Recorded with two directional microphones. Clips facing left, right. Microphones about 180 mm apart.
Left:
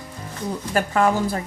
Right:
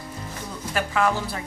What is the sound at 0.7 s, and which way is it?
Speech, 40° left (ahead or behind).